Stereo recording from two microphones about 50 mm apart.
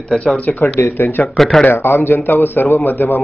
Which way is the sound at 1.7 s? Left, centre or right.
Left.